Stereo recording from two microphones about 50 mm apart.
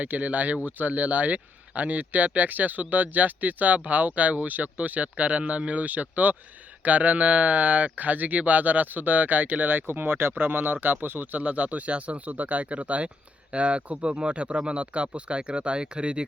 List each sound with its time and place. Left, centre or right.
0.0 s speech: right